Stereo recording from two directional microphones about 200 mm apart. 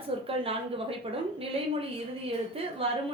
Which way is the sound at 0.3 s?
30° right (ahead or behind).